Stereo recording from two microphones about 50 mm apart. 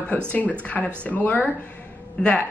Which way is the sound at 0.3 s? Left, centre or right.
Left.